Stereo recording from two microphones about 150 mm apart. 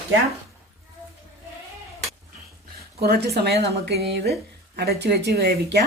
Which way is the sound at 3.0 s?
90° right.